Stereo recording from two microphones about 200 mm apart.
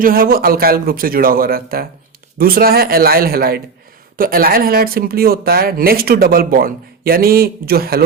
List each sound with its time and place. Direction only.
0.0 s speech: 45° right (ahead or behind)